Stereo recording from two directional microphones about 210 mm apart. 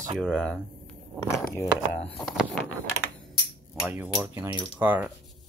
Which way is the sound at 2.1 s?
Centre (ahead or behind).